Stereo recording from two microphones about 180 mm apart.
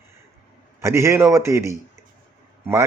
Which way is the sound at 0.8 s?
15° right (ahead or behind).